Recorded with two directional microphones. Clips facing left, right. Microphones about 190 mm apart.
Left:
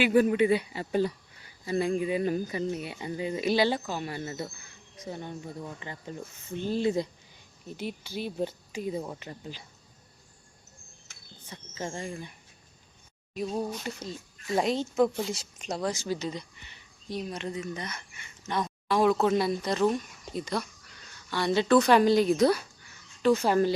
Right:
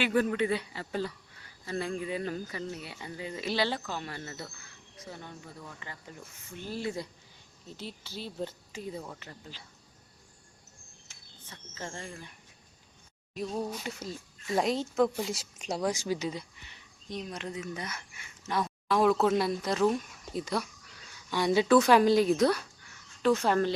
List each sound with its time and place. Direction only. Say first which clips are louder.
0.0 s speech: left 5 dB; 10° left (ahead or behind)
11.4 s speech: left 5 dB; 15° left (ahead or behind)
13.7 s speech: left 2 dB; 5° right (ahead or behind)